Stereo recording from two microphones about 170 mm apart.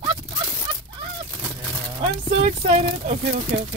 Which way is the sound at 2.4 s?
40° right (ahead or behind).